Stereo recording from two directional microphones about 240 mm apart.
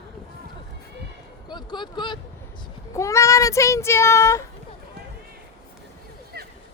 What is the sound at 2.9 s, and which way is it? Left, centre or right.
Speech, centre.